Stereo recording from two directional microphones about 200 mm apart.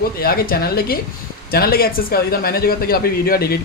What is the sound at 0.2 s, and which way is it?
Speech, 50° left (ahead or behind).